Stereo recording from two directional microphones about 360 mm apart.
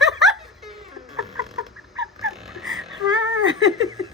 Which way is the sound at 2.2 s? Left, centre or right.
Centre.